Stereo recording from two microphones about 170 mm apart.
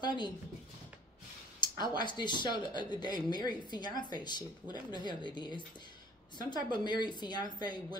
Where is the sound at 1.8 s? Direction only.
25° left (ahead or behind).